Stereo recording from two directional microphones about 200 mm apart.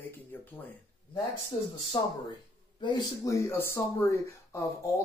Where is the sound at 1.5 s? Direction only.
20° left (ahead or behind).